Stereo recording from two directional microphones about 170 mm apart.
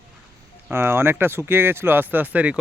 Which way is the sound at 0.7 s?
15° right (ahead or behind).